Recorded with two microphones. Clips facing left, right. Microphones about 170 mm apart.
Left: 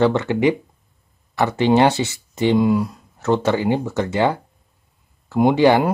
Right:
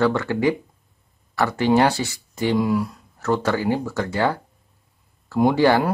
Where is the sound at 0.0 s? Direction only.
20° left (ahead or behind).